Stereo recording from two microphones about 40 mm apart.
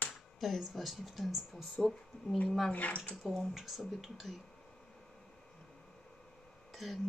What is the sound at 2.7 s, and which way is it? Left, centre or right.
Speech, left.